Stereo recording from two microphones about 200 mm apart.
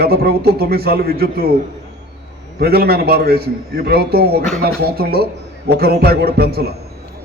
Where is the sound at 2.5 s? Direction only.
50° right (ahead or behind).